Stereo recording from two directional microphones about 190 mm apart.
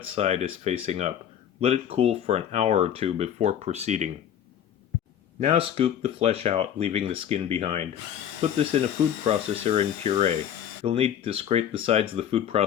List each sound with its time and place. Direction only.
0.1 s speech: 35° right (ahead or behind)
5.4 s speech: 35° right (ahead or behind)